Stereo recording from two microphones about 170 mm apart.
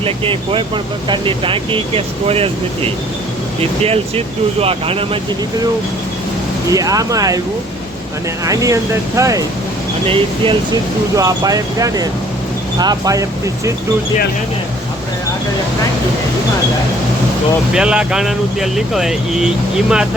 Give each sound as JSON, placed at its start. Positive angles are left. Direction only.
{"t": 0.0, "sound": "speech", "side_deg": -30}
{"t": 3.8, "sound": "speech", "side_deg": -35}
{"t": 6.7, "sound": "speech", "side_deg": -20}
{"t": 8.4, "sound": "speech", "side_deg": -20}
{"t": 10.1, "sound": "speech", "side_deg": -30}
{"t": 11.2, "sound": "speech", "side_deg": -20}
{"t": 17.7, "sound": "speech", "side_deg": -5}